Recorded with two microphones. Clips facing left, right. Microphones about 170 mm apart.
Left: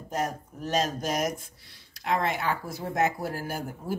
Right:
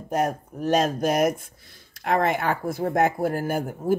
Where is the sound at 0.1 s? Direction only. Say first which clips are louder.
Right 6 dB; 55° right (ahead or behind).